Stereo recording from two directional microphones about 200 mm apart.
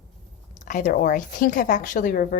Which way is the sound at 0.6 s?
40° left (ahead or behind).